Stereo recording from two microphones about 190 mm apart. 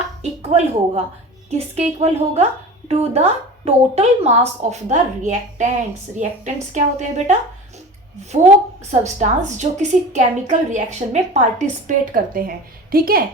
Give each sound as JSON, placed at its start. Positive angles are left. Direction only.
{"t": 0.2, "sound": "a woman's voice", "side_deg": -35}
{"t": 8.9, "sound": "a woman's voice", "side_deg": -40}